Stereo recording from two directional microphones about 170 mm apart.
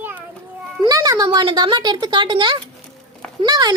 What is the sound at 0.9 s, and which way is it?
A woman's voice, 20° right (ahead or behind).